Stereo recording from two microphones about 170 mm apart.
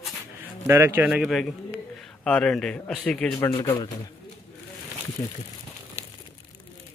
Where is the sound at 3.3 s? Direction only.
20° left (ahead or behind).